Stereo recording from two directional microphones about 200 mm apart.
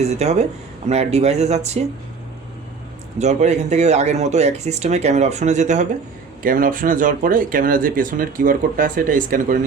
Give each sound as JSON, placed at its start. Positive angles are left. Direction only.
{"t": 0.0, "sound": "speech", "side_deg": -35}
{"t": 3.2, "sound": "speech", "side_deg": -35}